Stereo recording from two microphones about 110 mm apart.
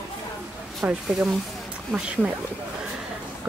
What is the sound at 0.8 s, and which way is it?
Speech, 10° right (ahead or behind).